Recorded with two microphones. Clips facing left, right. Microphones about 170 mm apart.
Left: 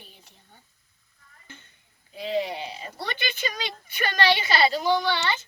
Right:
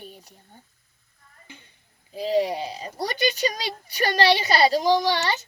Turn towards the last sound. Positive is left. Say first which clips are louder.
# right 3 dB
turn(degrees=-40)  # may be behind; listen again after turning